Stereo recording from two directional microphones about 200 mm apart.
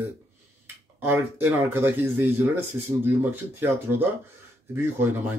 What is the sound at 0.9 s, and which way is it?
Speech, 10° right (ahead or behind).